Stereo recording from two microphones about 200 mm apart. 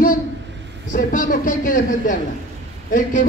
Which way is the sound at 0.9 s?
40° left (ahead or behind).